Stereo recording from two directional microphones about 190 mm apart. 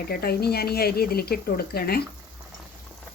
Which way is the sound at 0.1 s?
55° left (ahead or behind).